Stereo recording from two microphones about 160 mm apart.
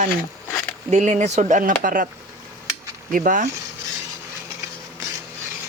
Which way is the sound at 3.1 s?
55° right (ahead or behind).